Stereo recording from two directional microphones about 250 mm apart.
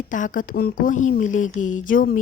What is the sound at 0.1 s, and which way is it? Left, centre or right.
A woman's voice, left.